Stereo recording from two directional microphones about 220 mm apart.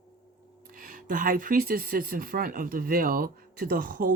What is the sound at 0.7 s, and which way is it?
Speech, 40° right (ahead or behind).